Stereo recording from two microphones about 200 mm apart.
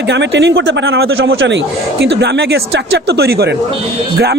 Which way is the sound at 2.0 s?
60° right (ahead or behind).